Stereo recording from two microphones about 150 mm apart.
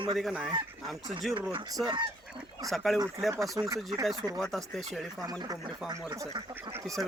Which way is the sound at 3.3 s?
20° right (ahead or behind).